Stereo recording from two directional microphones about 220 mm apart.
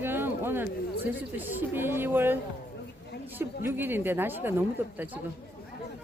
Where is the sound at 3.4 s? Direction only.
10° right (ahead or behind).